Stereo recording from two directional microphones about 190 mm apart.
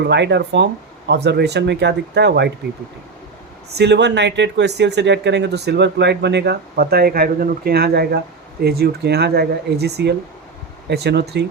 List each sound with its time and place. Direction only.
0.0 s speech: 65° right (ahead or behind)
3.8 s speech: 60° right (ahead or behind)